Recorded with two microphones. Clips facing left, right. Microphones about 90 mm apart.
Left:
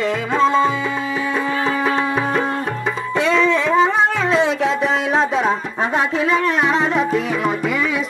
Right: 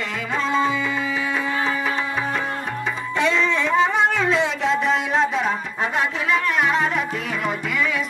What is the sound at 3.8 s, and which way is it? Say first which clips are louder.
Music: left 3 dB; 20° left (ahead or behind).